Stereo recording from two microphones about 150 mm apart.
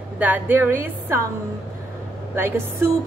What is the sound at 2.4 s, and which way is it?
Speech, 15° right (ahead or behind).